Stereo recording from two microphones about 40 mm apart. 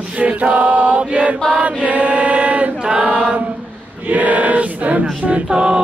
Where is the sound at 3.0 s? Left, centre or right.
Right.